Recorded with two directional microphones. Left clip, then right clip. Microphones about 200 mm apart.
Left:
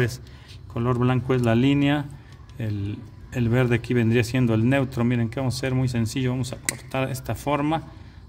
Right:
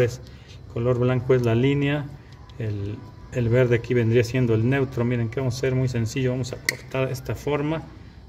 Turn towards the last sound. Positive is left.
turn(degrees=55)  # may be behind; listen again after turning